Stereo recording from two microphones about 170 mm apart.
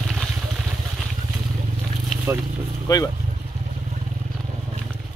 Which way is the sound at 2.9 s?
20° left (ahead or behind).